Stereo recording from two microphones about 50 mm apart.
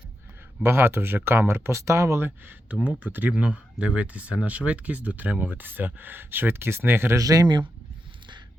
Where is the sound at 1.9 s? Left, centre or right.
Right.